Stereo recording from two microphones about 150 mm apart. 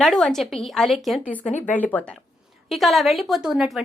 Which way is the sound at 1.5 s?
50° left (ahead or behind).